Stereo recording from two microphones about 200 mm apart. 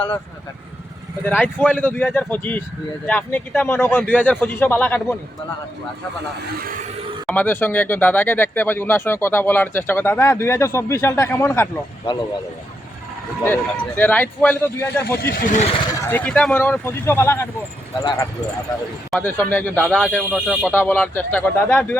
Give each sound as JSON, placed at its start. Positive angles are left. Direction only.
{"t": 1.2, "sound": "speech", "side_deg": 10}
{"t": 7.3, "sound": "speech", "side_deg": 10}
{"t": 13.4, "sound": "speech", "side_deg": 10}
{"t": 15.2, "sound": "speech", "side_deg": 50}
{"t": 15.9, "sound": "speech", "side_deg": 10}
{"t": 19.2, "sound": "speech", "side_deg": 10}
{"t": 20.7, "sound": "speech", "side_deg": 10}